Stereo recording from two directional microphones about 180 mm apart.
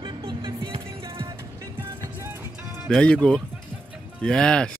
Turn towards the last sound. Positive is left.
turn(degrees=5)  # may be behind; listen again after turning